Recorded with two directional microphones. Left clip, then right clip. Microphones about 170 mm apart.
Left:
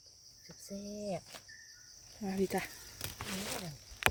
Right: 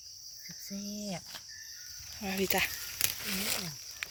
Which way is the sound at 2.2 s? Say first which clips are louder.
Right 5 dB; 15° left (ahead or behind).